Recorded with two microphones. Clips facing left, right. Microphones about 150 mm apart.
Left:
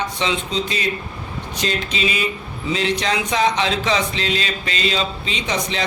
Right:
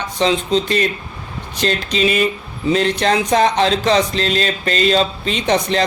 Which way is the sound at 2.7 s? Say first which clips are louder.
Right 5 dB; 50° right (ahead or behind).